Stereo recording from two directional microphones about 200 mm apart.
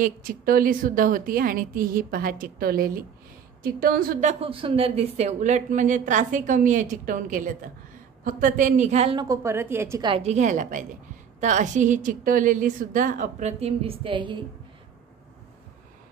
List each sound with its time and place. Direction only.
0.0 s a woman's voice: 45° right (ahead or behind); by 10.1 s 15° right (ahead or behind)
10.1 s a woman's voice: 35° right (ahead or behind)